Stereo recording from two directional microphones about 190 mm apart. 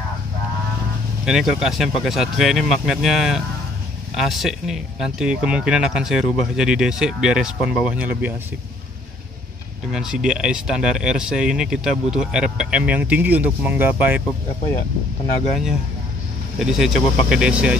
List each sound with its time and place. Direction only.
1.2 s speech: centre (ahead or behind)
9.8 s speech: 5° right (ahead or behind)
16.5 s speech: centre (ahead or behind)